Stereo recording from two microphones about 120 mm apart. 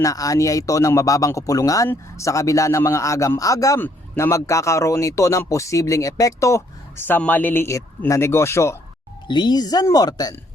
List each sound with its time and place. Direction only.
0.0 s speech: 30° left (ahead or behind)
3.8 s speech: 15° left (ahead or behind)
9.2 s speech: 40° left (ahead or behind)